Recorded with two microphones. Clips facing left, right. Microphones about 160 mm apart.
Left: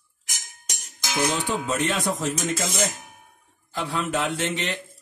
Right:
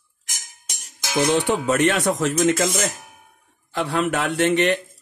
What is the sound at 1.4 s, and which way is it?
Speech, 70° right (ahead or behind).